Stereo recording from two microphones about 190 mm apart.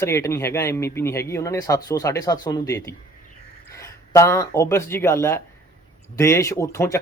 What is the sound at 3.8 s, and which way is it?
Speech, 15° left (ahead or behind).